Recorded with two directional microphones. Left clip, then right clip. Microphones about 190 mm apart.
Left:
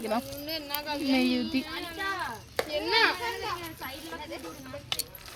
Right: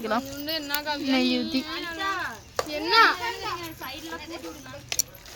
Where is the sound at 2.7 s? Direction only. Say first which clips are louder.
Right 6 dB; 45° right (ahead or behind).